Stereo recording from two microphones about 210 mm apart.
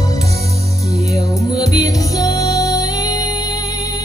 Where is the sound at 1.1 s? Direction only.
15° left (ahead or behind).